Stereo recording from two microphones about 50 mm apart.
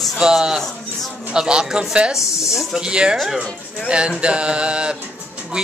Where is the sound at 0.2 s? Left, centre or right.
Centre.